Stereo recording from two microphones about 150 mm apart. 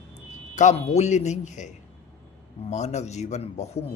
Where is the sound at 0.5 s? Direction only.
50° left (ahead or behind).